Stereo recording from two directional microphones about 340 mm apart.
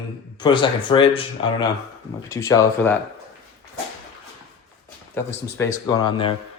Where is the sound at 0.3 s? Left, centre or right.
Centre.